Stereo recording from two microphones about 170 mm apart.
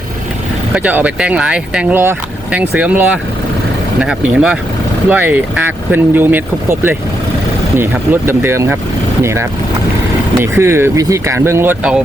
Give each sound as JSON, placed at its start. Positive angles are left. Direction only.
{"t": 0.7, "sound": "speech", "side_deg": -10}
{"t": 4.0, "sound": "speech", "side_deg": -5}